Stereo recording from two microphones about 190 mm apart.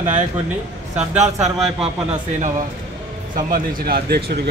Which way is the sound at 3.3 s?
50° right (ahead or behind).